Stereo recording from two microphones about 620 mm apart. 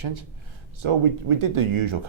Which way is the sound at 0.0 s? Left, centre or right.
Right.